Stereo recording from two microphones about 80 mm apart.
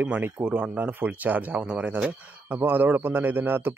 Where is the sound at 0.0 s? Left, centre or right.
Right.